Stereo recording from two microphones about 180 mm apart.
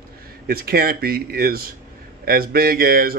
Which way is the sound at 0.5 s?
55° right (ahead or behind).